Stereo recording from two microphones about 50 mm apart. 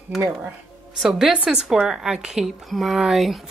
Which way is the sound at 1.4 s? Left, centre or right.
Centre.